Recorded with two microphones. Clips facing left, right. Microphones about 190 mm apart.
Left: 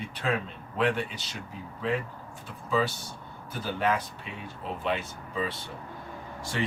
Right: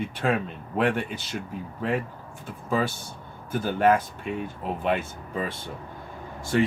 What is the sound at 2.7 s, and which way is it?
A man's voice, 50° right (ahead or behind).